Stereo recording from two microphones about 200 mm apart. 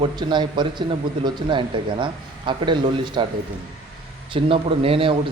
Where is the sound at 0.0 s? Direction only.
20° right (ahead or behind).